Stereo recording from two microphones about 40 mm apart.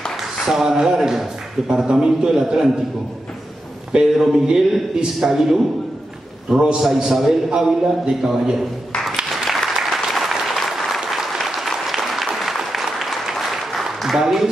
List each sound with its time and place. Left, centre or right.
0.2 s a man's voice: centre
4.1 s a man's voice: centre
6.5 s a man's voice: right
9.5 s applause: centre